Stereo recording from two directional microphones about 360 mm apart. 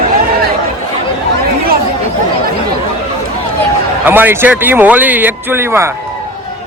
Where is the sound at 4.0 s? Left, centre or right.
Centre.